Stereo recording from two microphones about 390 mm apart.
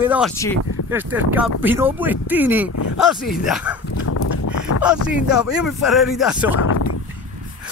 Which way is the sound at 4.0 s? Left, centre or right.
Left.